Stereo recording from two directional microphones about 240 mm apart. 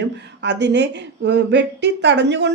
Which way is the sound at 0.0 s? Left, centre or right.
Right.